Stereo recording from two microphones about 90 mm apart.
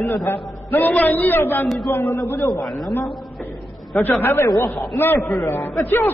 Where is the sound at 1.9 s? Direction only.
30° left (ahead or behind).